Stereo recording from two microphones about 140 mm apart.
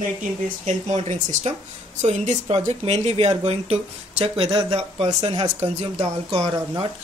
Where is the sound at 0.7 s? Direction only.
55° right (ahead or behind).